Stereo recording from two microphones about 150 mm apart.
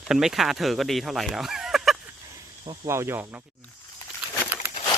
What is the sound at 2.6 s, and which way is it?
Speech, 20° right (ahead or behind).